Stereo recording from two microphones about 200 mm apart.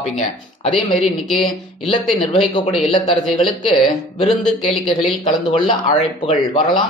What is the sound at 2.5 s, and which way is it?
Speech, 25° left (ahead or behind).